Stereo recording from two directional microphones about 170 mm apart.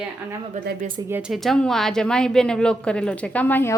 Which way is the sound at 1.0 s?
10° right (ahead or behind).